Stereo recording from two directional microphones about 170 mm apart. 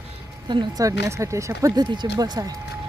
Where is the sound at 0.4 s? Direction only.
25° right (ahead or behind).